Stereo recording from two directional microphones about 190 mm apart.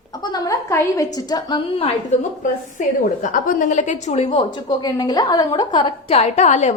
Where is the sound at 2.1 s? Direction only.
35° left (ahead or behind).